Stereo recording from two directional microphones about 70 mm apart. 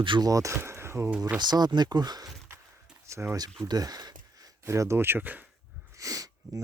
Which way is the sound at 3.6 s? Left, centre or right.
Right.